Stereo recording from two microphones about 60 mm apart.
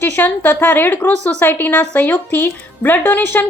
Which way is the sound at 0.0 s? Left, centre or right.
Left.